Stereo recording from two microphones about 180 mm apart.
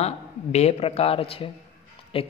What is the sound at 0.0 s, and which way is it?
A man's voice, 35° left (ahead or behind).